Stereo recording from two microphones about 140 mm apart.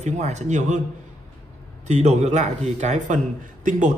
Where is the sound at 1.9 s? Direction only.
55° right (ahead or behind).